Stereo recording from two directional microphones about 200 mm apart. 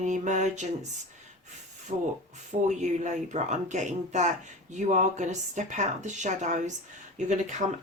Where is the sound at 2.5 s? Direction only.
35° right (ahead or behind).